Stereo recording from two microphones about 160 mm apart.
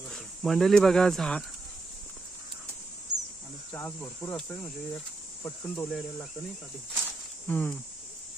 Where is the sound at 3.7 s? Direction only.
10° left (ahead or behind).